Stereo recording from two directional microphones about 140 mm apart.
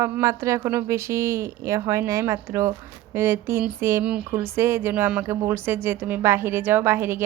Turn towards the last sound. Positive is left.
turn(degrees=-15)  # may be behind; listen again after turning